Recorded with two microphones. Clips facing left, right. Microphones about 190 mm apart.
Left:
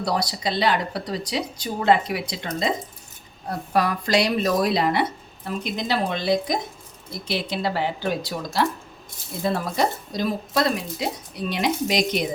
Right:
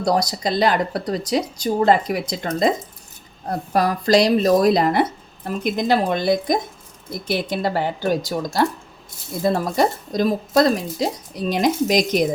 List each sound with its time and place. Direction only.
0.0 s a woman's voice: 45° right (ahead or behind)